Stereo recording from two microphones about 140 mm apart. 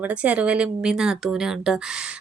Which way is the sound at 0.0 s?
10° right (ahead or behind).